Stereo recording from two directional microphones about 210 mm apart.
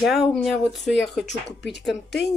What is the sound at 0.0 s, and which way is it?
Speech, centre (ahead or behind).